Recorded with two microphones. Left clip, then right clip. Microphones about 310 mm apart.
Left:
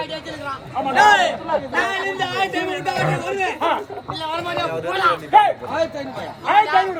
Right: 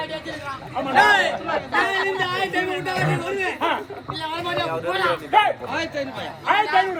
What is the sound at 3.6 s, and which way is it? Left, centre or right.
Speech, left.